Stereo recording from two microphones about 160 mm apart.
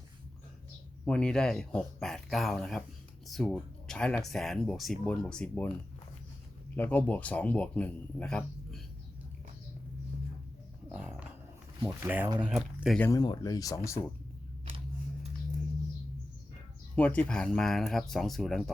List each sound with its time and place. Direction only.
1.0 s speech: 5° left (ahead or behind)
6.7 s a man's voice: 10° left (ahead or behind)
10.9 s dog: 5° right (ahead or behind)
11.9 s speech: 10° right (ahead or behind)
13.0 s speech: 20° left (ahead or behind)
16.9 s speech: 10° left (ahead or behind)